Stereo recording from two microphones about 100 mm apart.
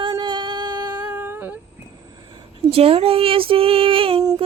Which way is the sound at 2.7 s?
80° right.